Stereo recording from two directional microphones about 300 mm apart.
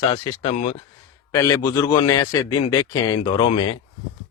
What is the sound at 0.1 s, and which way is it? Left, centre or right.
Speech, left.